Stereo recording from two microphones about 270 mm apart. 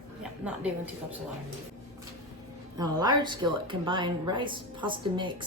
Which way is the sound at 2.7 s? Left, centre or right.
Centre.